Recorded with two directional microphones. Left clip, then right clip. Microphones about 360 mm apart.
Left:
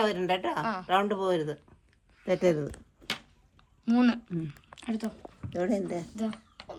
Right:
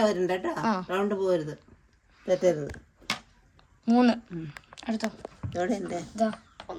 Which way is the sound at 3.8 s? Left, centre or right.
Centre.